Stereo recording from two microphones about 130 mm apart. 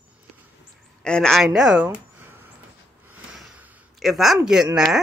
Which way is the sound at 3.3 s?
5° right (ahead or behind).